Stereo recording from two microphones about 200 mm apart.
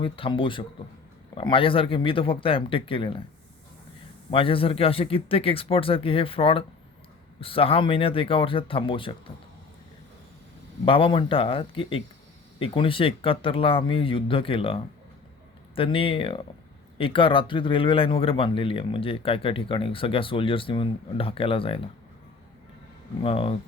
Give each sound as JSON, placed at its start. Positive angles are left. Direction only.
{"t": 0.0, "sound": "speech", "side_deg": 25}
{"t": 4.3, "sound": "speech", "side_deg": 25}
{"t": 10.8, "sound": "speech", "side_deg": 25}
{"t": 23.2, "sound": "speech", "side_deg": 30}